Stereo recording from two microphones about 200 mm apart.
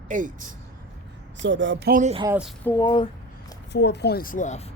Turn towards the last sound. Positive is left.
turn(degrees=40)  # may be behind; listen again after turning